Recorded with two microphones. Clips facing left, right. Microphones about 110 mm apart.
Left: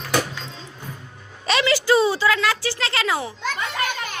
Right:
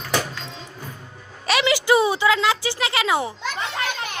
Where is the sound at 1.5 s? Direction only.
15° right (ahead or behind).